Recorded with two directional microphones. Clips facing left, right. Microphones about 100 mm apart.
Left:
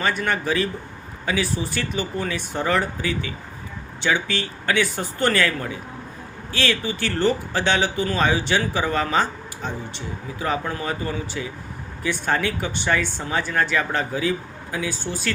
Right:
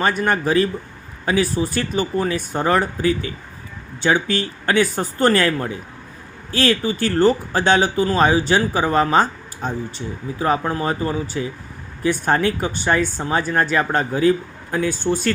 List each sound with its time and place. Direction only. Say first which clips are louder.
0.0 s speech: right 4 dB; 45° right (ahead or behind)